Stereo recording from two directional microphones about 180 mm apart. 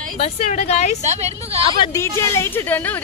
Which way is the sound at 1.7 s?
20° left (ahead or behind).